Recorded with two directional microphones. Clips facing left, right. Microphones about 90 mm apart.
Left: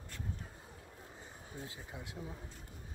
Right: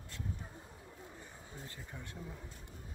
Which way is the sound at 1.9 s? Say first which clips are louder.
Left 2 dB; 10° left (ahead or behind).